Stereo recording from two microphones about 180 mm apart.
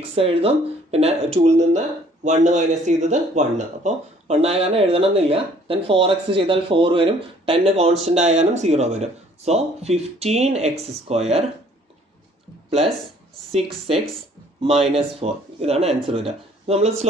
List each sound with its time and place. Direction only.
0.1 s speech: 30° right (ahead or behind)
14.6 s speech: 35° right (ahead or behind)